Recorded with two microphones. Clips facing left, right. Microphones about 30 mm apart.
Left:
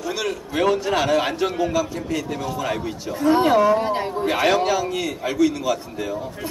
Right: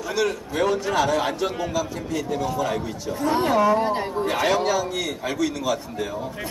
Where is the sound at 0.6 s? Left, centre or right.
Left.